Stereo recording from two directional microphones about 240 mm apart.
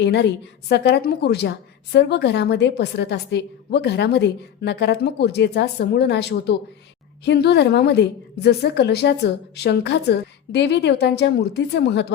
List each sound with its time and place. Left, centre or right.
0.0 s a woman's voice: left